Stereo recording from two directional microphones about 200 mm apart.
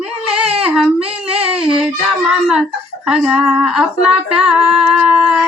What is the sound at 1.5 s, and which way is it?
Music, centre (ahead or behind).